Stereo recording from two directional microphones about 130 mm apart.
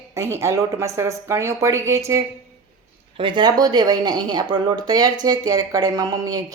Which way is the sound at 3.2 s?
40° right (ahead or behind).